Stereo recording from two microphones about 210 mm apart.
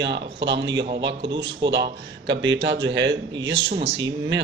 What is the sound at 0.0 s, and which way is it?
Speech, 55° right (ahead or behind).